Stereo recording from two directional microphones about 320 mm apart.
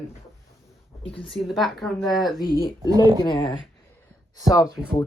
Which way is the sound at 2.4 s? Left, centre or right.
Centre.